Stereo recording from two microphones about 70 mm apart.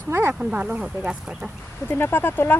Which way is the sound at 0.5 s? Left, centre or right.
Centre.